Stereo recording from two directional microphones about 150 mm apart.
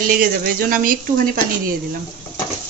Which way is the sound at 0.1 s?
70° right (ahead or behind).